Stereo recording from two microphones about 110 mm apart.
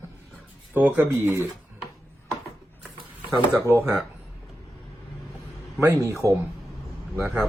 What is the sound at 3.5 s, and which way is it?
Speech, 25° right (ahead or behind).